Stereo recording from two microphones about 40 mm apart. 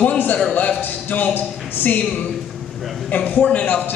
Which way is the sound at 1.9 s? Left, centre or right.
Left.